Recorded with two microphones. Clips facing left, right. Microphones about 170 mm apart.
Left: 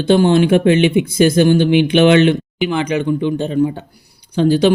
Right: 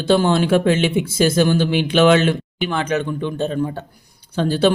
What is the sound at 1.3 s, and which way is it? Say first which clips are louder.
Speech: left 5 dB; 55° left (ahead or behind).